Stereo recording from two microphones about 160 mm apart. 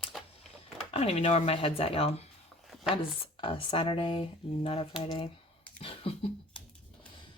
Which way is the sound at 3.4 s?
35° left (ahead or behind).